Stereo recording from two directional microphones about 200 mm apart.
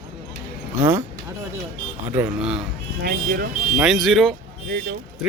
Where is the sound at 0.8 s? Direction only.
10° right (ahead or behind).